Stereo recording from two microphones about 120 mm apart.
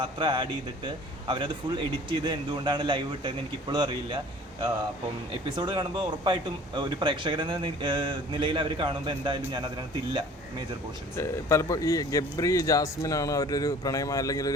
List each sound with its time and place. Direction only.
0.0 s speech: 40° right (ahead or behind)
5.3 s speech: 40° right (ahead or behind)
11.2 s speech: 20° left (ahead or behind)